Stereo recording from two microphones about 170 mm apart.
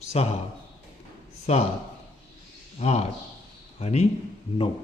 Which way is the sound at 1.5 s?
40° left (ahead or behind).